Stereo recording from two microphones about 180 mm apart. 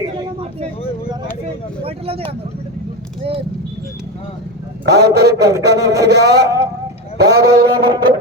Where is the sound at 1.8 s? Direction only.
30° right (ahead or behind).